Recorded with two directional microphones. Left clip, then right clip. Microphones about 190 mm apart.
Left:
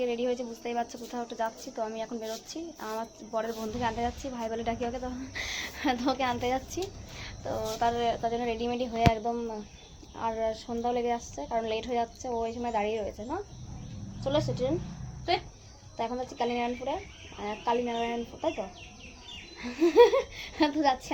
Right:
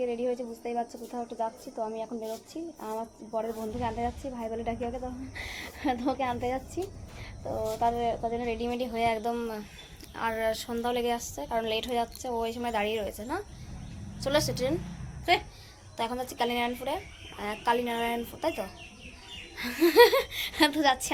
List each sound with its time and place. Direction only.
0.0 s a woman's voice: 5° right (ahead or behind)
15.3 s a child's voice: 30° right (ahead or behind)
16.0 s a woman's voice: 5° right (ahead or behind)
19.5 s a woman's voice: 5° right (ahead or behind)